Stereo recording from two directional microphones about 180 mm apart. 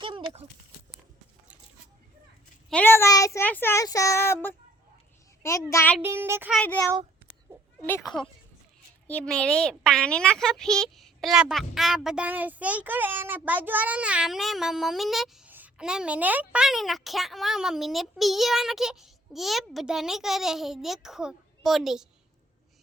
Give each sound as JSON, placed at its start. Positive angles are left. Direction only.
{"t": 0.0, "sound": "a sound", "side_deg": -30}
{"t": 2.6, "sound": "speech", "side_deg": 10}
{"t": 6.0, "sound": "a child's voice", "side_deg": -15}
{"t": 6.5, "sound": "speech", "side_deg": 5}
{"t": 9.0, "sound": "speech", "side_deg": 5}